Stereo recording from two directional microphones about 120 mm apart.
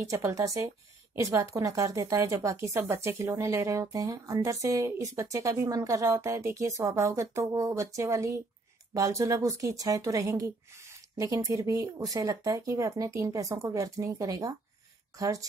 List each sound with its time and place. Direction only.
0.1 s speech: 25° right (ahead or behind)